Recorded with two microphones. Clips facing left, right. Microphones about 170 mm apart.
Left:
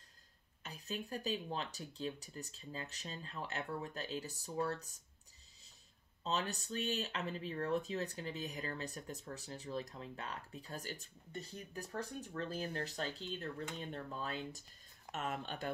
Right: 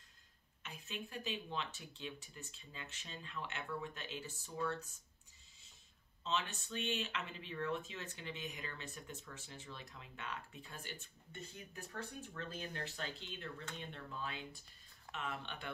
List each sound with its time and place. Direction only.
0.6 s speech: 35° left (ahead or behind)
6.2 s speech: 40° left (ahead or behind)